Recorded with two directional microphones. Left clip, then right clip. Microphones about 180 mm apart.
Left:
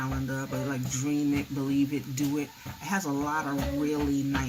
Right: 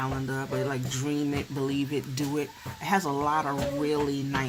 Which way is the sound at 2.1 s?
45° right (ahead or behind).